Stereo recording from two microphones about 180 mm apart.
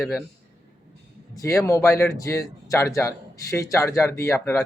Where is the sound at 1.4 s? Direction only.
15° left (ahead or behind).